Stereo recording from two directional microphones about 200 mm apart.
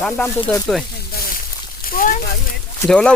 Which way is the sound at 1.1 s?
50° left (ahead or behind).